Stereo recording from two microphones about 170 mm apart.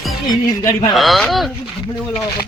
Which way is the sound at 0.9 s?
Centre (ahead or behind).